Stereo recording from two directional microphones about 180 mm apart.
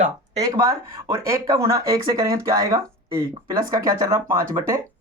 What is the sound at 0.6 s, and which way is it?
Speech, 15° right (ahead or behind).